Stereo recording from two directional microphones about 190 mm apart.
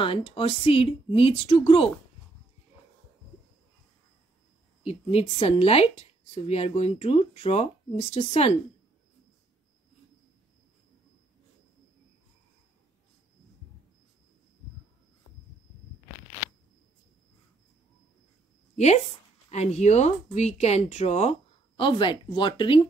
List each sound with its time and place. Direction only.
0.0 s speech: 30° left (ahead or behind)
4.8 s speech: 30° left (ahead or behind)
19.5 s speech: 35° left (ahead or behind)